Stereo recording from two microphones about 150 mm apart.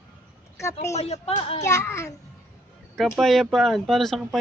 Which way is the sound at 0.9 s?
45° left (ahead or behind).